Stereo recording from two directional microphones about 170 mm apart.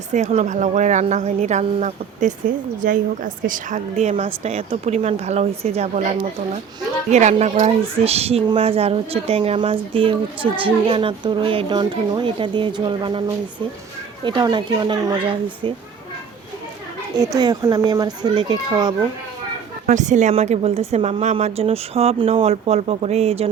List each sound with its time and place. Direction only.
0.1 s speech: 45° right (ahead or behind)
7.1 s speech: 45° right (ahead or behind)
17.2 s speech: 25° right (ahead or behind)
19.9 s speech: 45° right (ahead or behind)